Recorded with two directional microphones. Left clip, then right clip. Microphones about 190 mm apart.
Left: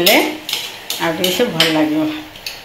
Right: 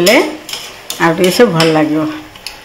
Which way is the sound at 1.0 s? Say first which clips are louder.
Right 7 dB; 45° right (ahead or behind).